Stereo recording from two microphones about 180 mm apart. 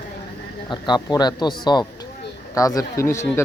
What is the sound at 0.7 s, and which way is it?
Speech, 25° left (ahead or behind).